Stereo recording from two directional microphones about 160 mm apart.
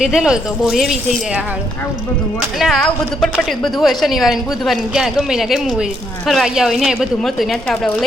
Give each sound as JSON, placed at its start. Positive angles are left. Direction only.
{"t": 0.0, "sound": "a woman's voice", "side_deg": -5}
{"t": 2.6, "sound": "a woman's voice", "side_deg": 0}